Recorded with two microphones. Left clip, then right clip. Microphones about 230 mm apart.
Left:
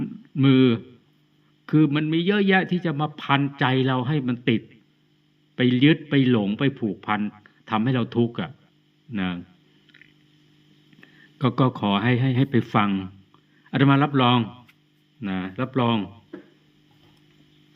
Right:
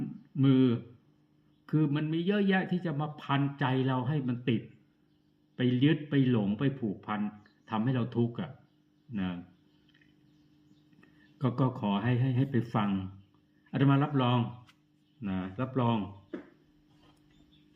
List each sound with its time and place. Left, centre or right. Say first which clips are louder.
0.0 s a sound: left 8 dB; left
1.6 s a man's voice: left 10 dB; left
11.3 s a man's voice: left 9 dB; left